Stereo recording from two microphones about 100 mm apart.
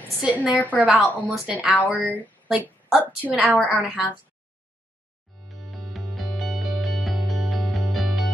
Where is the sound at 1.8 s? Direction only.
15° right (ahead or behind).